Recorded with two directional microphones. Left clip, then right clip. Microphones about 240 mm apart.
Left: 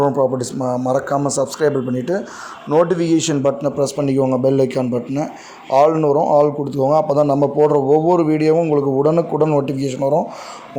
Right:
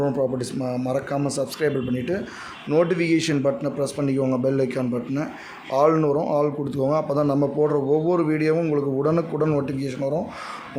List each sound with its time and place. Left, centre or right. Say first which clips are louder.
0.0 s speech: left 7 dB; centre